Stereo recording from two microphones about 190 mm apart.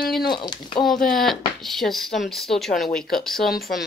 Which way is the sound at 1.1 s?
Centre (ahead or behind).